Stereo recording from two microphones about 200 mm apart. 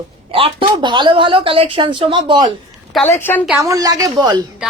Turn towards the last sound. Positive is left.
turn(degrees=-20)  # may be behind; listen again after turning